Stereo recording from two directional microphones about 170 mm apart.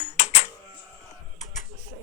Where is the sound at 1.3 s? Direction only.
45° left (ahead or behind).